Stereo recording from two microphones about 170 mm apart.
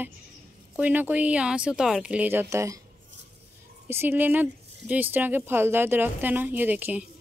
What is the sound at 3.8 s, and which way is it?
Speech, 15° right (ahead or behind).